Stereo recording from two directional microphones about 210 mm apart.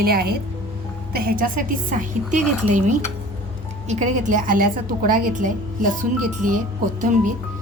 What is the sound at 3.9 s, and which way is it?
A woman's voice, 35° right (ahead or behind).